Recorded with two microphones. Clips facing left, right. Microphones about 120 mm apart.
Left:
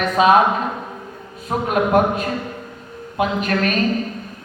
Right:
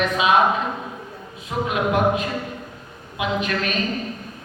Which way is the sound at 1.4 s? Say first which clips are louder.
Left 3 dB; 45° left (ahead or behind).